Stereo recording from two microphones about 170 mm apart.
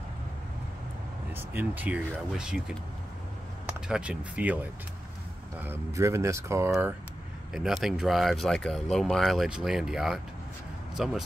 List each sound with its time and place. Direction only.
1.3 s speech: 10° right (ahead or behind)
3.8 s speech: 5° right (ahead or behind)
7.5 s speech: centre (ahead or behind)